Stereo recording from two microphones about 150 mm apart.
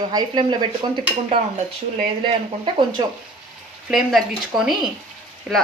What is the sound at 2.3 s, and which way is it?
Speech, 35° right (ahead or behind).